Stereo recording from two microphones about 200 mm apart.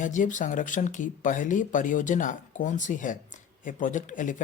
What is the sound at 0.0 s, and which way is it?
Speech, 40° left (ahead or behind).